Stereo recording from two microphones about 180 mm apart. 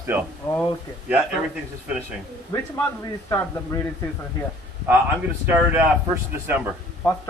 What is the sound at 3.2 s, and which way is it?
Speech, 15° left (ahead or behind).